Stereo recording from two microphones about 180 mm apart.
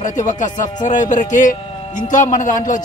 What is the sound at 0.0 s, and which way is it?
Speech, 45° left (ahead or behind).